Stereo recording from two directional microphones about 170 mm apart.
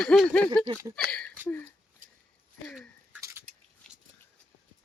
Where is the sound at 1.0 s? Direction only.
5° left (ahead or behind).